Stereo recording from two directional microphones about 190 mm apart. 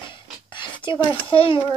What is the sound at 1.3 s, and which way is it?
Speech, 30° left (ahead or behind).